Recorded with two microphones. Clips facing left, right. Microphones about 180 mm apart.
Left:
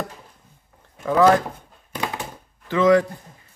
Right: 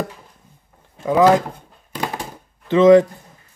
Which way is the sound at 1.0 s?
15° right (ahead or behind).